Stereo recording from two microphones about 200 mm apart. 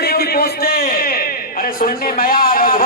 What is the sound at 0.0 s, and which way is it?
A man's voice, 50° left (ahead or behind).